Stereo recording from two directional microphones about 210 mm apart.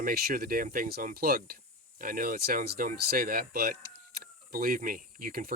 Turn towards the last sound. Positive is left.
turn(degrees=-40)  # may be behind; listen again after turning